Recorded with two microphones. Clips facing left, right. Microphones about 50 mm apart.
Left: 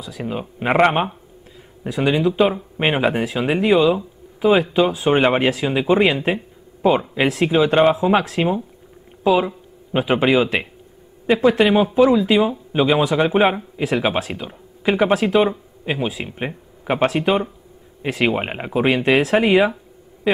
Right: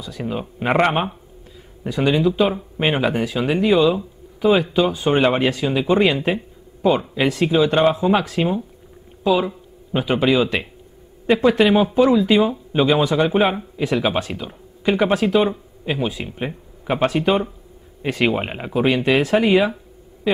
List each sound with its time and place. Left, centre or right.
0.0 s speech: centre
11.2 s speech: centre